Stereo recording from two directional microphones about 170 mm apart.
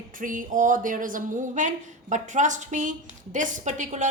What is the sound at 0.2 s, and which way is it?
Speech, 50° right (ahead or behind).